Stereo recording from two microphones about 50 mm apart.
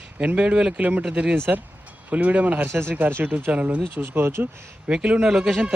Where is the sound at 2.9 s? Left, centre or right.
Right.